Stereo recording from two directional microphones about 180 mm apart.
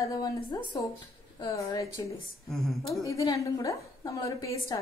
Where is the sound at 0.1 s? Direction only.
20° left (ahead or behind).